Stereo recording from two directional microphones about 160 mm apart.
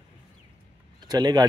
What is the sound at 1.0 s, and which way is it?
Speech, 25° right (ahead or behind).